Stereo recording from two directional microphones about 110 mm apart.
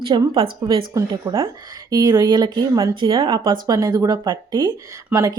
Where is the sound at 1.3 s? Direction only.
45° right (ahead or behind).